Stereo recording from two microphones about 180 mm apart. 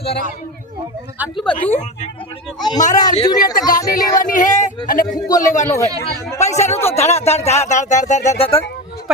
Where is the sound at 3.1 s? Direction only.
25° left (ahead or behind).